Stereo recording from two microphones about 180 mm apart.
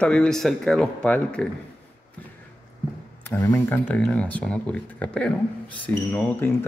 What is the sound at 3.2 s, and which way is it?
Speech, 15° left (ahead or behind).